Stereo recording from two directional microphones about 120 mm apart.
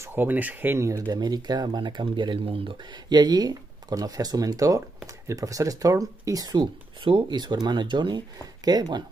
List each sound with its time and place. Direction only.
0.0 s speech: 15° right (ahead or behind); by 9.0 s 35° right (ahead or behind)